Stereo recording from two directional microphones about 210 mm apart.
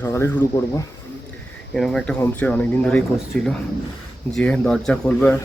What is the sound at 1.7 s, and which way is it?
Speech, centre (ahead or behind).